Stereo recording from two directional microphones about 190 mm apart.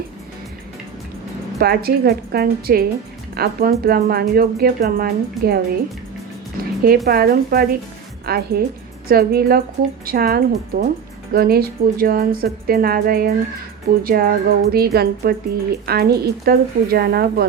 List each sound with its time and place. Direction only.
1.5 s speech: 55° right (ahead or behind)
6.8 s speech: 50° right (ahead or behind)